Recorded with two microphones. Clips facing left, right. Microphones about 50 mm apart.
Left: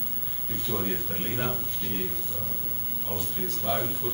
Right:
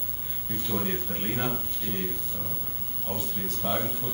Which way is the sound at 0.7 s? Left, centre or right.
Centre.